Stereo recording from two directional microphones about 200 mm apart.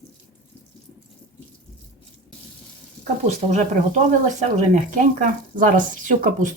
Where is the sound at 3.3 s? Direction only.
35° right (ahead or behind).